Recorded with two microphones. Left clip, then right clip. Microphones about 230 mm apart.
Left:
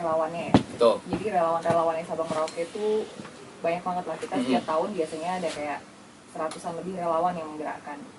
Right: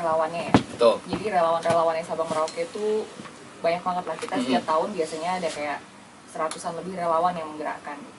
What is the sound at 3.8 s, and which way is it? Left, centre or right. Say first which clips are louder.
Speech: right 3 dB; centre.